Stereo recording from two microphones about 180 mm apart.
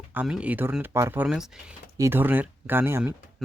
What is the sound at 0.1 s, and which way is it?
Speech, 10° right (ahead or behind).